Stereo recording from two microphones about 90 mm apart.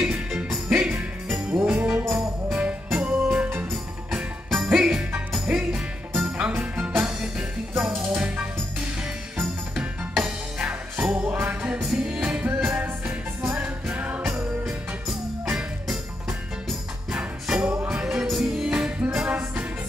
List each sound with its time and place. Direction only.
0.0 s music: 5° right (ahead or behind)
1.5 s jingle bell: 20° right (ahead or behind)
2.1 s music: 5° right (ahead or behind)
10.6 s music: 15° right (ahead or behind)
15.4 s music: 5° right (ahead or behind)